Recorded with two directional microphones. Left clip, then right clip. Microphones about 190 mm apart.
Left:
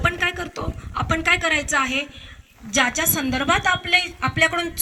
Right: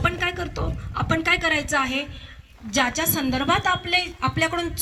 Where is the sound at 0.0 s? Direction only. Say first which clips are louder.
Left 2 dB; 5° left (ahead or behind).